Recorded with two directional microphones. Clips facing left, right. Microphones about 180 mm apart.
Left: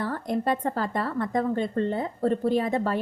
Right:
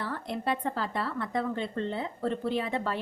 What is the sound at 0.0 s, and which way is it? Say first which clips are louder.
A woman's voice: left 6 dB; 45° left (ahead or behind).